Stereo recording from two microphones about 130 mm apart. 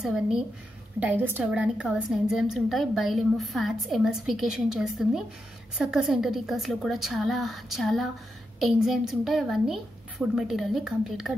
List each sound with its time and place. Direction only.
0.0 s a woman's voice: 5° right (ahead or behind)